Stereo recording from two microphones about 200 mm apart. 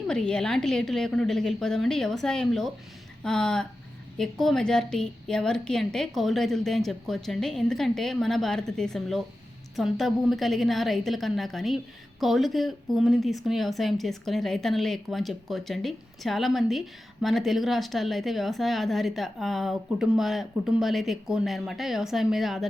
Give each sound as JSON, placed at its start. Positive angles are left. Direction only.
{"t": 0.1, "sound": "speech", "side_deg": 5}